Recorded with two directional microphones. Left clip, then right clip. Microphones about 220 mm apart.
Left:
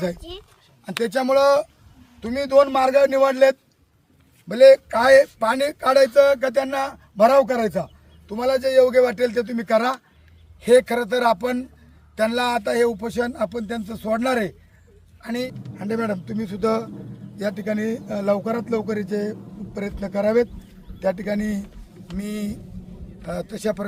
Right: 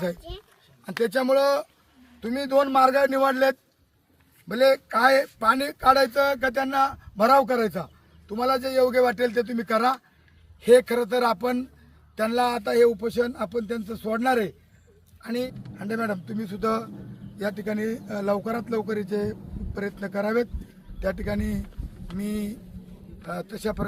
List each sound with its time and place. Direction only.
0.2 s speech: 25° left (ahead or behind)
0.9 s speech: 5° left (ahead or behind)